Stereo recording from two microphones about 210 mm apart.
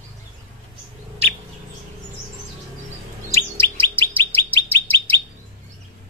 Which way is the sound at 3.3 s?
10° left (ahead or behind).